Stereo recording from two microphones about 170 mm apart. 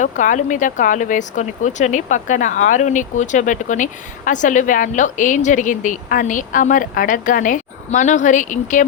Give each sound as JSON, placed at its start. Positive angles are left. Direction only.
{"t": 0.0, "sound": "a woman's voice", "side_deg": 50}